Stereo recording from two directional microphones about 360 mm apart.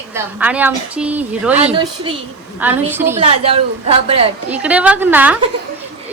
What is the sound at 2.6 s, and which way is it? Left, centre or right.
Speech, centre.